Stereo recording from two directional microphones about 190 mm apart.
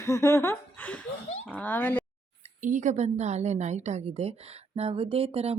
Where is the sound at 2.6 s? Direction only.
40° right (ahead or behind).